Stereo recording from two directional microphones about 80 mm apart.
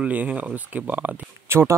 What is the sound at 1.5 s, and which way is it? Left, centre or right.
Speech, right.